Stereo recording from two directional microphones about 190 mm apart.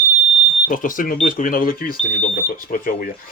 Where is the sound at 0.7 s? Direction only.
45° left (ahead or behind).